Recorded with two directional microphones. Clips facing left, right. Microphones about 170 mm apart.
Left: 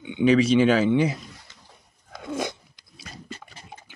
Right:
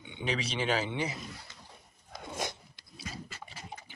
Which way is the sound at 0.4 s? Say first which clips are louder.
Left 13 dB; 50° left (ahead or behind).